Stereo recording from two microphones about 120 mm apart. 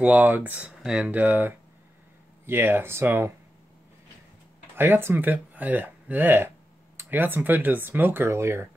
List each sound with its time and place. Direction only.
0.0 s speech: 15° right (ahead or behind)
4.7 s speech: 20° right (ahead or behind)